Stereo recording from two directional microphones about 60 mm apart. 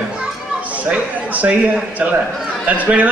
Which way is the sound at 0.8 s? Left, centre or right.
Right.